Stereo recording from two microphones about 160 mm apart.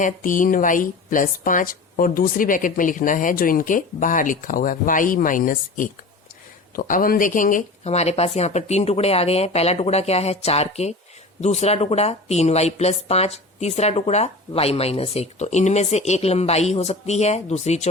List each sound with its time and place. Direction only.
0.0 s speech: 55° left (ahead or behind)